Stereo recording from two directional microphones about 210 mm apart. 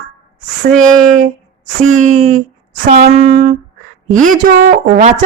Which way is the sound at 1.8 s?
35° right (ahead or behind).